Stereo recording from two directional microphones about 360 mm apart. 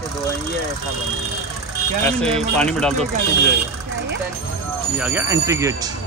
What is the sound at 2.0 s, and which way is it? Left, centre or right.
Speech, centre.